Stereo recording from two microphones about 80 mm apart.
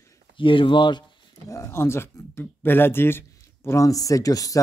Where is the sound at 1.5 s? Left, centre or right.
Left.